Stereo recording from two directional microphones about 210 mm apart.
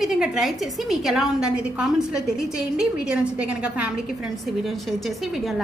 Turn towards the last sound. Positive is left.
turn(degrees=0)  # may be behind; listen again after turning